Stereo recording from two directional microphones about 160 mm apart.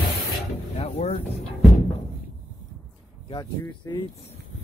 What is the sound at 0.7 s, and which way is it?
Speech, 40° left (ahead or behind).